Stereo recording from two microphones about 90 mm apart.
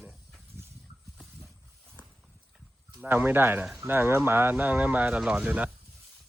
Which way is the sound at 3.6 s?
5° right (ahead or behind).